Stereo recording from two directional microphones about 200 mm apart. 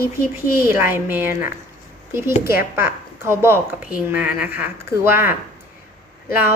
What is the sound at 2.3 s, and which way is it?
Speech, 50° left (ahead or behind).